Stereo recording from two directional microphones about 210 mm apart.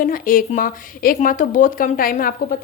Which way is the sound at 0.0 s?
40° left (ahead or behind).